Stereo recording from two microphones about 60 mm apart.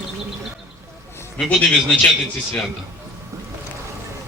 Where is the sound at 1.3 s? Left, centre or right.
Centre.